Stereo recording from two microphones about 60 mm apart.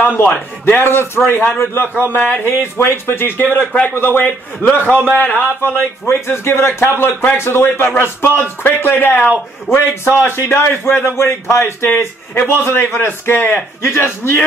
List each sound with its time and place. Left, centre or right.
0.2 s a man's voice: left
0.7 s a man's voice: left
5.6 s a man's voice: left
9.7 s a man's voice: left